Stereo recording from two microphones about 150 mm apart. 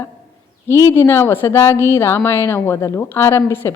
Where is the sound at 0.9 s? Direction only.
15° left (ahead or behind).